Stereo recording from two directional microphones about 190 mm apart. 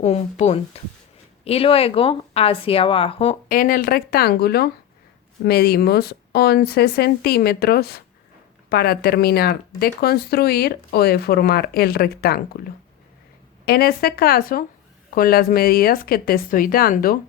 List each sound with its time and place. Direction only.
0.0 s a woman's voice: 35° left (ahead or behind)
3.5 s a woman's voice: 45° left (ahead or behind)
13.7 s a woman's voice: 55° left (ahead or behind)